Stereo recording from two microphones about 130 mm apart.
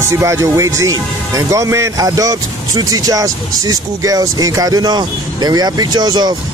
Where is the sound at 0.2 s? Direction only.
25° right (ahead or behind).